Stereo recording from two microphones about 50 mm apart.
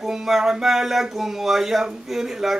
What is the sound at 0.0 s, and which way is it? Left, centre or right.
Speech, centre.